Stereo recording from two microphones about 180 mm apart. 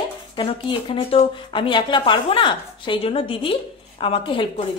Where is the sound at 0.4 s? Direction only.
30° left (ahead or behind).